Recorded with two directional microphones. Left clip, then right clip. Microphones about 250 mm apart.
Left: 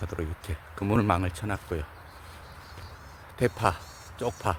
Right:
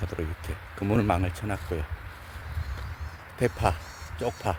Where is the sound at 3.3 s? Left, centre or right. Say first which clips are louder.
Even; centre.